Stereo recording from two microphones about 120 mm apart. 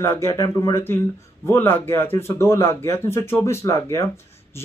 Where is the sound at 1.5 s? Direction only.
15° left (ahead or behind).